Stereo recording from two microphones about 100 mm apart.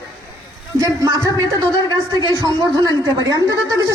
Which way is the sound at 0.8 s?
35° right (ahead or behind).